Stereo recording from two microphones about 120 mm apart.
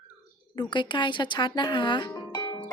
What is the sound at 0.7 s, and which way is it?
Speech, 40° left (ahead or behind).